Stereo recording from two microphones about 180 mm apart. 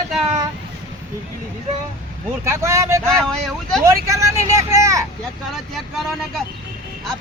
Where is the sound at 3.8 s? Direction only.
15° right (ahead or behind).